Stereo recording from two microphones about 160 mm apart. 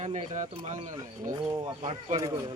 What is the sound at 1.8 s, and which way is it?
Speech, 40° right (ahead or behind).